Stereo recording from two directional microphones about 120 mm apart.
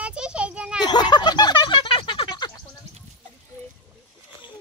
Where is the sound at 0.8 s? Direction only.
35° left (ahead or behind).